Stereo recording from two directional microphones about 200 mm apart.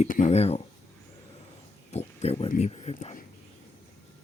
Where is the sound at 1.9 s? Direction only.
30° left (ahead or behind).